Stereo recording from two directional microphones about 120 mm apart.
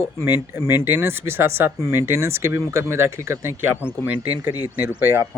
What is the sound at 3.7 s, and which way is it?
Speech, 20° left (ahead or behind).